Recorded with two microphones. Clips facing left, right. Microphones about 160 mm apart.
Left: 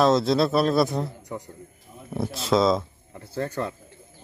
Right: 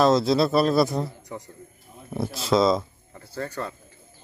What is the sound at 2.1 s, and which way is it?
Speech, centre (ahead or behind).